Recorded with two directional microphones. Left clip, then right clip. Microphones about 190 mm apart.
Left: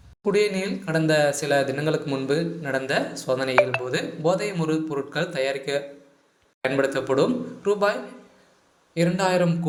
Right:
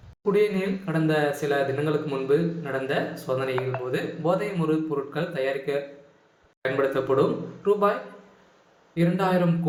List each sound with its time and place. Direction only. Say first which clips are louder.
0.3 s speech: left 1 dB; 35° left (ahead or behind)
6.8 s speech: right 2 dB; 35° left (ahead or behind)
9.0 s speech: left 2 dB; 35° left (ahead or behind)